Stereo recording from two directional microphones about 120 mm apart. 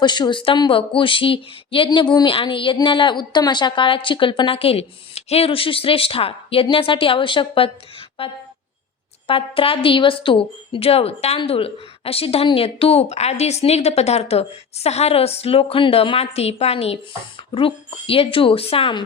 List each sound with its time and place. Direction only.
0.0 s a woman's voice: 40° left (ahead or behind)